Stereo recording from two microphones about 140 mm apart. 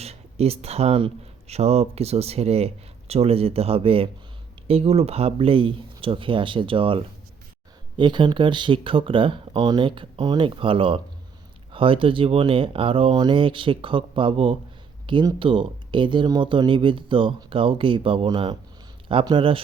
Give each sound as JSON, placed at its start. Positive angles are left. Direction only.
{"t": 0.0, "sound": "speech", "side_deg": -45}